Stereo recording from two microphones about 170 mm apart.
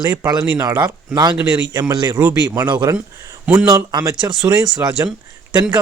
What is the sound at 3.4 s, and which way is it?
Speech, 10° right (ahead or behind).